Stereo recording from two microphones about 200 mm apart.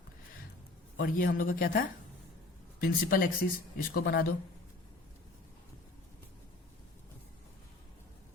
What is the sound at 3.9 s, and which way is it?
Speech, 50° left (ahead or behind).